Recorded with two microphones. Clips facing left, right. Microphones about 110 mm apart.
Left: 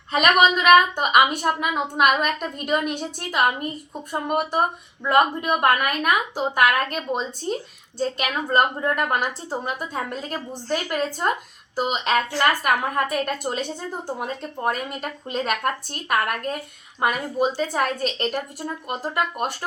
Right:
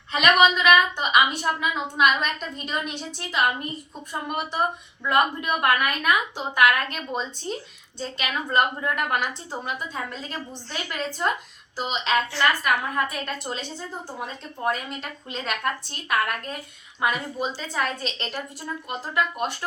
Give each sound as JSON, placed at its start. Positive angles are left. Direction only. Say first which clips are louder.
{"t": 0.1, "sound": "a woman's voice", "louder": "left 1 dB", "side_deg": 45}